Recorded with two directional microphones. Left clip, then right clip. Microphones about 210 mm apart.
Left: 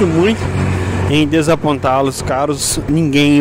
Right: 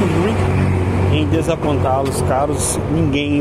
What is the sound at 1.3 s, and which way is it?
Speech, 50° left (ahead or behind).